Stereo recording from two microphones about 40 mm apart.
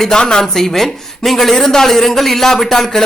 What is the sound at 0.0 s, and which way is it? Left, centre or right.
Speech, centre.